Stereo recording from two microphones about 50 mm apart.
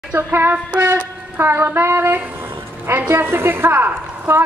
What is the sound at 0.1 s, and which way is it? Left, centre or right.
Speech, right.